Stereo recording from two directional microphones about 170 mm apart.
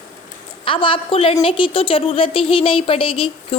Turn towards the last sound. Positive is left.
turn(degrees=30)  # may be behind; listen again after turning